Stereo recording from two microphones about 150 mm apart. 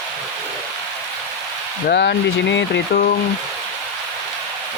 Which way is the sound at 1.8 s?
90° left.